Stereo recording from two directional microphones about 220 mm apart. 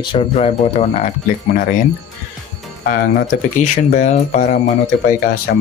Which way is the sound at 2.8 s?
40° left (ahead or behind).